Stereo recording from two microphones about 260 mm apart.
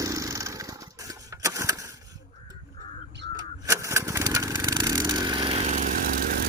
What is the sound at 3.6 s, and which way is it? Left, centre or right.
Lawn mower, centre.